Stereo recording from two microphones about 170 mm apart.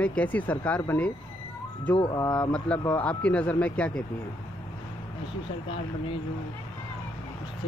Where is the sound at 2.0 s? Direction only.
25° left (ahead or behind).